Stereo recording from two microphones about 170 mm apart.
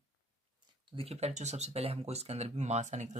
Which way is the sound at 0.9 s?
35° right (ahead or behind).